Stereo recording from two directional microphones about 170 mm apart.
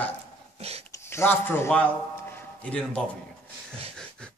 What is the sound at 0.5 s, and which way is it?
Speech, 35° right (ahead or behind).